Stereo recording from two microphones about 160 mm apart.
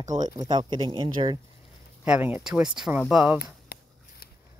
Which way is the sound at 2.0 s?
10° right (ahead or behind).